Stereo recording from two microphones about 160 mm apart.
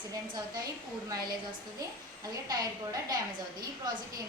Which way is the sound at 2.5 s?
25° right (ahead or behind).